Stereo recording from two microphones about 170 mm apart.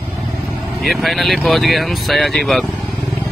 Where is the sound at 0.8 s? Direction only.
Centre (ahead or behind).